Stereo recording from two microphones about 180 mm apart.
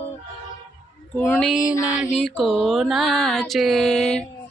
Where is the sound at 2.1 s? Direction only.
Centre (ahead or behind).